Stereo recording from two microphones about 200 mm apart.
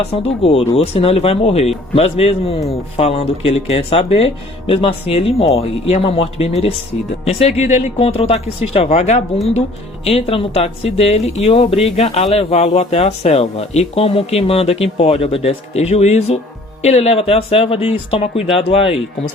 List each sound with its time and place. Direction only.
0.0 s speech: 30° left (ahead or behind)